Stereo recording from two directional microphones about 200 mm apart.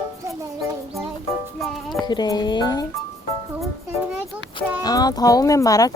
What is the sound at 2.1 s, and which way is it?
Speech, 20° left (ahead or behind).